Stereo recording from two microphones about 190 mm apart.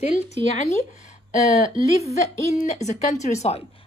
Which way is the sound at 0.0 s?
35° left (ahead or behind).